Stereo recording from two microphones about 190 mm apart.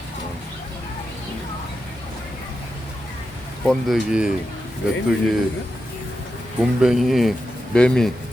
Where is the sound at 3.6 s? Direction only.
Centre (ahead or behind).